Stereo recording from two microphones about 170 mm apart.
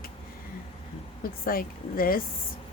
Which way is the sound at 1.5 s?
60° left (ahead or behind).